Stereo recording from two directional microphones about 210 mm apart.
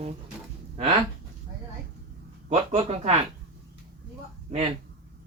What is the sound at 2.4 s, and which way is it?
Speech, 30° right (ahead or behind).